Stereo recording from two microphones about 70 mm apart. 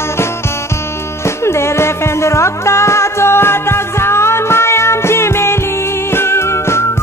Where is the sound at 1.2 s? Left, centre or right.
Left.